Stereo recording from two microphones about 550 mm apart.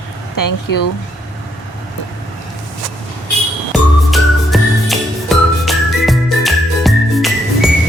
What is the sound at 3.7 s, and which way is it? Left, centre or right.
Music, centre.